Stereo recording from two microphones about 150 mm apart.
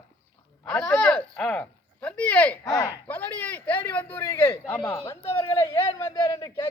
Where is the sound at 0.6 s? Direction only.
5° left (ahead or behind).